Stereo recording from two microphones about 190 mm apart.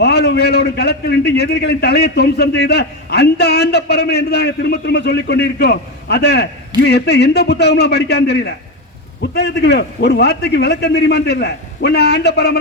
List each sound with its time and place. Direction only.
0.0 s a man's voice: 60° left (ahead or behind)